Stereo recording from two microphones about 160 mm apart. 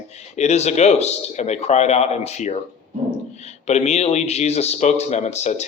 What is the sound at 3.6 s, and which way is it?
Speech, 45° left (ahead or behind).